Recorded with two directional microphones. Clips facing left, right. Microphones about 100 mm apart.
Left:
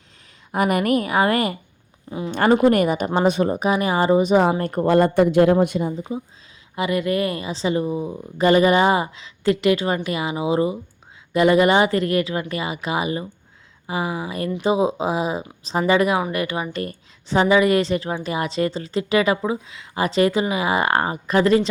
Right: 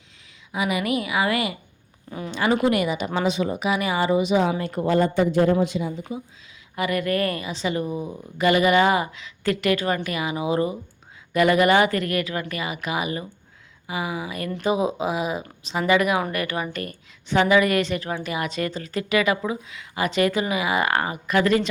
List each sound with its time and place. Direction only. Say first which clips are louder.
0.5 s speech: left 5 dB; 50° left (ahead or behind)
2.0 s speech: left 5 dB; 20° left (ahead or behind)
2.3 s speech: left 5 dB; 50° left (ahead or behind)
4.9 s a man's voice: left 4 dB; 60° left (ahead or behind)
6.0 s a woman's voice: left 4 dB; 20° left (ahead or behind)